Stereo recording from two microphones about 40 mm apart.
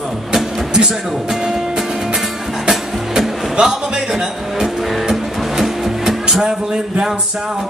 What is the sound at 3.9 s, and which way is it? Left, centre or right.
Music, centre.